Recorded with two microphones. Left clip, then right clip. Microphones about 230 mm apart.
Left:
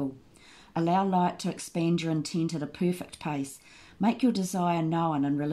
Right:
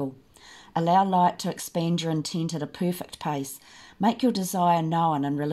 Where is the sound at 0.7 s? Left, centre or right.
Right.